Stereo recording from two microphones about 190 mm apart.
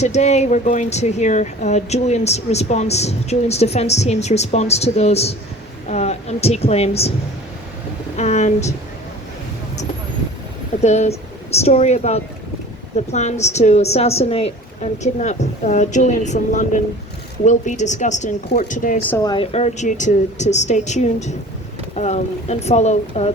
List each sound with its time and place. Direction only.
0.0 s a woman's voice: 35° left (ahead or behind)
8.1 s speech: 35° left (ahead or behind)
10.8 s speech: 35° left (ahead or behind)
19.1 s speech: 20° left (ahead or behind)